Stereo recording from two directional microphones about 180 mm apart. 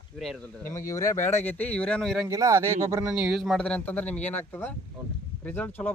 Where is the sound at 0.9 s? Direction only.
15° left (ahead or behind).